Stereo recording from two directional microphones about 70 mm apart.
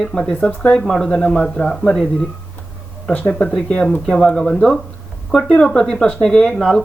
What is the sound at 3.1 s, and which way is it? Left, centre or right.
Speech, centre.